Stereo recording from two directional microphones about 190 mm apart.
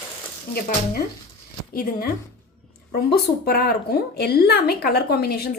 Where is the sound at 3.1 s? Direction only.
55° left (ahead or behind).